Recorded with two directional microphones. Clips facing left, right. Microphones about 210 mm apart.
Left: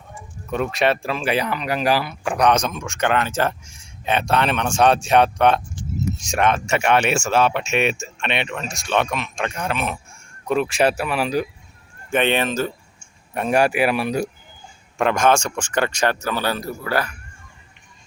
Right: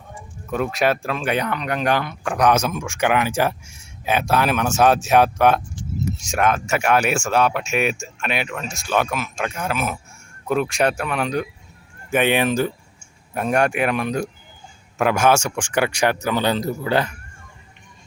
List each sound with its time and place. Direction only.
0.5 s speech: centre (ahead or behind)
12.1 s speech: 10° right (ahead or behind)
13.3 s speech: centre (ahead or behind)
14.9 s speech: 5° right (ahead or behind)